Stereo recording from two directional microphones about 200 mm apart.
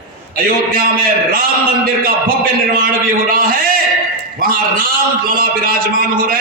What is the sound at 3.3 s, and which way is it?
A man's voice, 45° right (ahead or behind).